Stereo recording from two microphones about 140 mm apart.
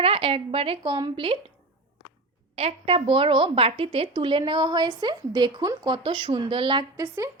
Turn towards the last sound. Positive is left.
turn(degrees=-35)  # may be behind; listen again after turning